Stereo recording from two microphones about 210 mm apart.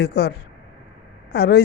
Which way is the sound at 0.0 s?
50° left (ahead or behind).